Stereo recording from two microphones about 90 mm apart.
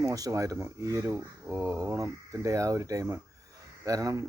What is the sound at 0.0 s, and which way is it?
Speech, 40° right (ahead or behind).